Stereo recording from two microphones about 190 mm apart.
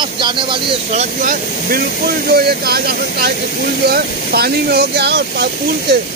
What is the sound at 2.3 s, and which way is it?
Speech, 55° right (ahead or behind).